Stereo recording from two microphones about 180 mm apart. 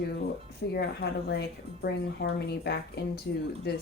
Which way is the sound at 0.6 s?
70° left (ahead or behind).